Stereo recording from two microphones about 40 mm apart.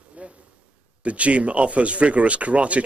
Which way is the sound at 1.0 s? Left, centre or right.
Right.